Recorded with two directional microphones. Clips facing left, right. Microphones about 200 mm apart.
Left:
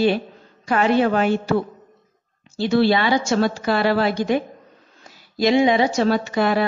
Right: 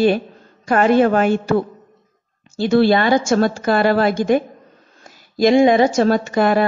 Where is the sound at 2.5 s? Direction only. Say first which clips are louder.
Right 3 dB; 50° right (ahead or behind).